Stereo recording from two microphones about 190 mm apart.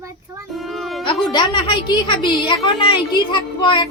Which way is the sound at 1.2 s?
25° left (ahead or behind).